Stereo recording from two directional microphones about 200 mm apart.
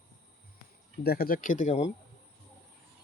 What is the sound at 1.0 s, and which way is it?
Speech, 50° left (ahead or behind).